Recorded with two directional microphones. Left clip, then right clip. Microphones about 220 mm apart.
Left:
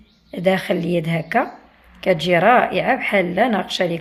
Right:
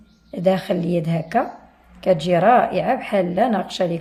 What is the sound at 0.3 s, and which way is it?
A woman's voice, centre (ahead or behind).